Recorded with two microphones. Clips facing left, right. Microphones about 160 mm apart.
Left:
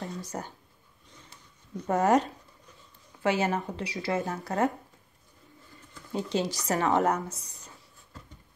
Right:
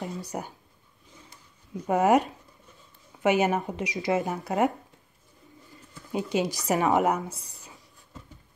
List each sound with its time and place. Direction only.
0.3 s speech: 10° right (ahead or behind)
1.8 s speech: 10° right (ahead or behind)
5.9 s speech: 10° right (ahead or behind)